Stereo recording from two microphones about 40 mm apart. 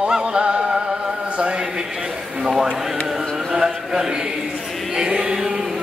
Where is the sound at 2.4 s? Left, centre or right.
Centre.